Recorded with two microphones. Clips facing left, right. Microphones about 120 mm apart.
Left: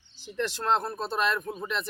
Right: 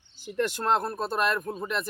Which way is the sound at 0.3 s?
50° right (ahead or behind).